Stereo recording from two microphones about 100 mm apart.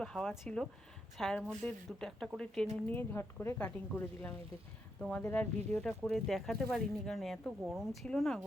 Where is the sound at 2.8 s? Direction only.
20° left (ahead or behind).